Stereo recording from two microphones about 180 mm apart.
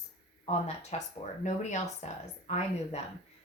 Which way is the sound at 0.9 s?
35° left (ahead or behind).